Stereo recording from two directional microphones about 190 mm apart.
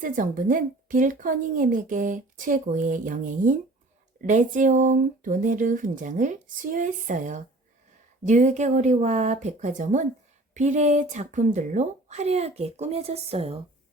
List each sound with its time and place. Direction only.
0.0 s speech: 45° right (ahead or behind)